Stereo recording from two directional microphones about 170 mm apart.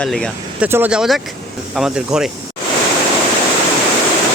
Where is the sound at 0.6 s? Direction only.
10° right (ahead or behind).